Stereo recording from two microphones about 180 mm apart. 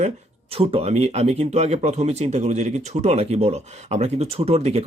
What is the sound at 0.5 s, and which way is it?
Speech, 35° right (ahead or behind).